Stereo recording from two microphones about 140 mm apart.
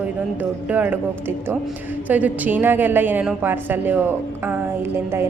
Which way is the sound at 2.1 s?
10° right (ahead or behind).